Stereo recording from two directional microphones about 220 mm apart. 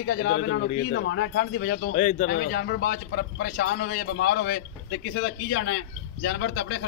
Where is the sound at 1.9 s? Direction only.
35° left (ahead or behind); by 6.8 s 60° left (ahead or behind).